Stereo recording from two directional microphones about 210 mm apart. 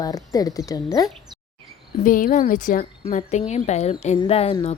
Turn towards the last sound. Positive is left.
turn(degrees=30)  # may be behind; listen again after turning